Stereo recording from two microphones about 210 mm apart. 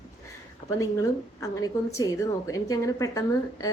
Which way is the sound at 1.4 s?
15° left (ahead or behind).